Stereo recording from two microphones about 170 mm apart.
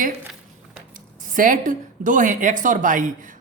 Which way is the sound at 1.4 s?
50° right (ahead or behind).